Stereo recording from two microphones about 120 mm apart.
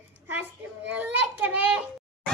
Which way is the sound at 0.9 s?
15° right (ahead or behind).